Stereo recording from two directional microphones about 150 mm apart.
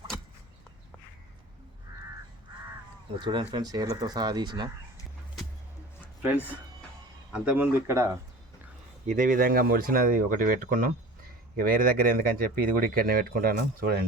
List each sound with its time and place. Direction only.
3.2 s speech: 30° right (ahead or behind)
6.2 s speech: 10° right (ahead or behind)
9.0 s speech: 60° right (ahead or behind); by 14.0 s 90° right